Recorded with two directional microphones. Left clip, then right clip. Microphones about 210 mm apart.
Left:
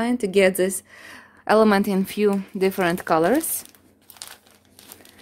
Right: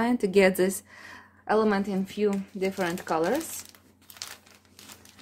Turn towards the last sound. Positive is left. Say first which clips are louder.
# even
turn(degrees=5)  # may be behind; listen again after turning